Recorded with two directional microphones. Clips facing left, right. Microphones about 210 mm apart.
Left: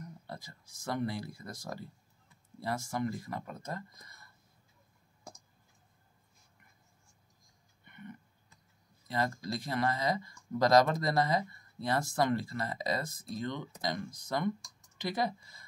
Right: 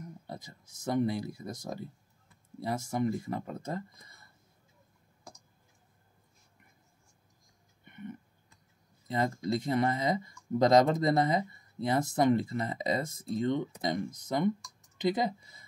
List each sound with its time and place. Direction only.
0.3 s speech: 20° right (ahead or behind)
7.8 s a sound: 20° right (ahead or behind)
9.0 s speech: 20° right (ahead or behind)